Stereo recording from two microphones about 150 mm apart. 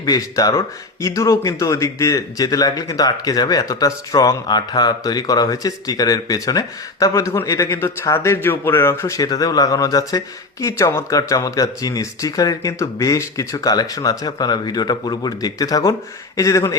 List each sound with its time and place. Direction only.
0.0 s speech: 25° left (ahead or behind)